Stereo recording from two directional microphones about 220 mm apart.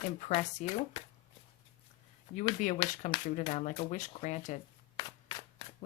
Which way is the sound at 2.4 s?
35° left (ahead or behind).